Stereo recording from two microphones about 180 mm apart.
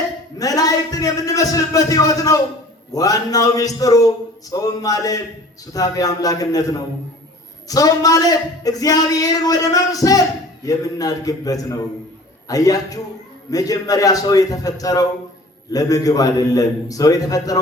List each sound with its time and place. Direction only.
0.3 s speech: 20° left (ahead or behind)